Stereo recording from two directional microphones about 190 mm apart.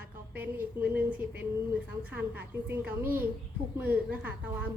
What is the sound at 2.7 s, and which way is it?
A woman's voice, 10° right (ahead or behind).